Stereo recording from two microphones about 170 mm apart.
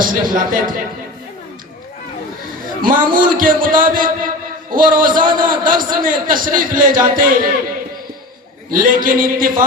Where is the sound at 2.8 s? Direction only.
55° right (ahead or behind).